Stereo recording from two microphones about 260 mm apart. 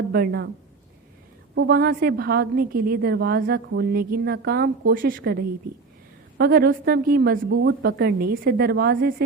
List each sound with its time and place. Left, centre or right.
0.1 s a woman's voice: right
1.5 s a woman's voice: right